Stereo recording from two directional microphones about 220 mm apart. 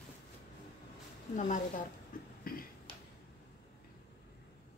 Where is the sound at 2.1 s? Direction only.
40° left (ahead or behind).